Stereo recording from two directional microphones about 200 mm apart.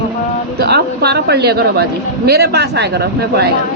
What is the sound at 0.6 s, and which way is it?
A woman's voice, 55° right (ahead or behind).